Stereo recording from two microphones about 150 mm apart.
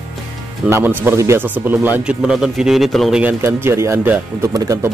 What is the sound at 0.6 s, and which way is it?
Speech, 10° right (ahead or behind).